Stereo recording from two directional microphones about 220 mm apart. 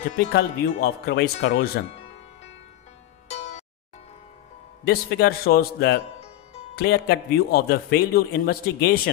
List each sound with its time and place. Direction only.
0.2 s a man's voice: 50° left (ahead or behind)
3.3 s music: 30° left (ahead or behind)
4.8 s a man's voice: 45° left (ahead or behind)